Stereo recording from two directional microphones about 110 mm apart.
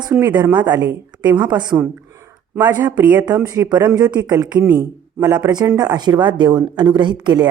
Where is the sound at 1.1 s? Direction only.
40° right (ahead or behind).